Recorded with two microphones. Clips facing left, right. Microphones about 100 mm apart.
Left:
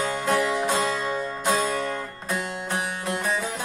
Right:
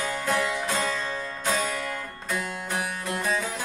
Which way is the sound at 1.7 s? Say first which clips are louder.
Left 4 dB; 30° left (ahead or behind).